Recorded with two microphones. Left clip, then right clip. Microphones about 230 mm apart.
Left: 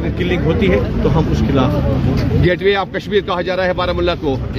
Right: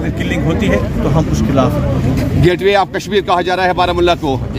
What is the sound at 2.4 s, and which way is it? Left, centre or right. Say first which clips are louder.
Speech: right 4 dB; right.